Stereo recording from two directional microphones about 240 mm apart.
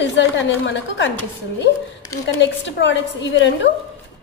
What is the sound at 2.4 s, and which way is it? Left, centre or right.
A woman's voice, left.